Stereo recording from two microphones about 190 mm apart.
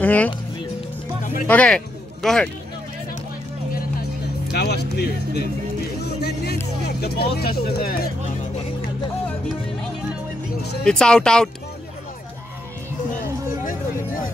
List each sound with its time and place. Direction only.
0.0 s speech: 10° left (ahead or behind)
1.2 s music: 45° left (ahead or behind)
1.5 s speech: 5° left (ahead or behind)
4.5 s speech: 60° left (ahead or behind)
6.0 s music: 55° left (ahead or behind)
7.3 s speech: 50° left (ahead or behind)
10.8 s speech: 5° left (ahead or behind)
13.2 s music: 45° left (ahead or behind)